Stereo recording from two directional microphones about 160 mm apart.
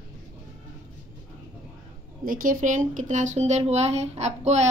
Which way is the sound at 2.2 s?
55° right (ahead or behind).